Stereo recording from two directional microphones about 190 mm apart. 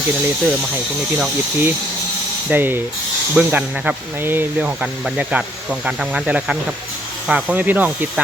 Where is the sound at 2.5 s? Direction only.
10° right (ahead or behind).